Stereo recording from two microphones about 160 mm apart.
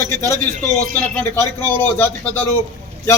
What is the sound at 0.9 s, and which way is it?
A man's voice, 15° left (ahead or behind).